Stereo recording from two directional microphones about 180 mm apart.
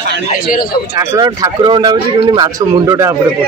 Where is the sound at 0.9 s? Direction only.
20° right (ahead or behind).